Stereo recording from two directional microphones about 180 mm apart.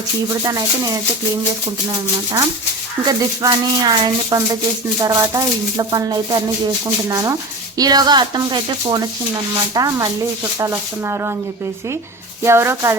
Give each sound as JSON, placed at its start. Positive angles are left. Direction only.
{"t": 0.4, "sound": "rub", "side_deg": -20}
{"t": 3.1, "sound": "rub", "side_deg": -20}
{"t": 10.6, "sound": "speech", "side_deg": -15}
{"t": 12.4, "sound": "speech", "side_deg": -15}